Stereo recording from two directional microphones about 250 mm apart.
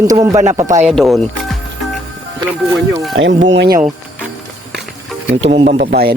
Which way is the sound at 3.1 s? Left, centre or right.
Right.